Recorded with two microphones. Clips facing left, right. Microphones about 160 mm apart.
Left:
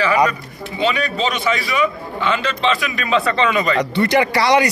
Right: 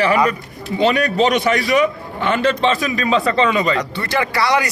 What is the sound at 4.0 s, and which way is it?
Speech, 20° left (ahead or behind).